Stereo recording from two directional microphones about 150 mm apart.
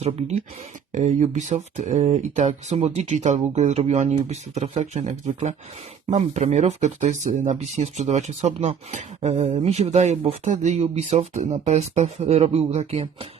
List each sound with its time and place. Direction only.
0.0 s speech: 45° right (ahead or behind)